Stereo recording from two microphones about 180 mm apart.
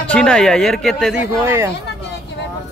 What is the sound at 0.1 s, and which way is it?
Speech, 5° left (ahead or behind).